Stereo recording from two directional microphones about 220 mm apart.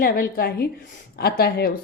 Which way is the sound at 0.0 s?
45° left (ahead or behind).